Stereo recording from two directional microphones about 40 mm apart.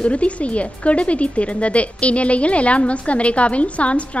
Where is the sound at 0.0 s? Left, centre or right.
Left.